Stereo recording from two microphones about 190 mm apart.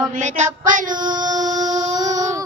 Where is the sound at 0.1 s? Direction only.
40° right (ahead or behind).